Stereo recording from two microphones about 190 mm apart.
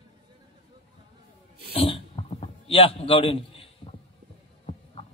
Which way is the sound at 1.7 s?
30° left (ahead or behind).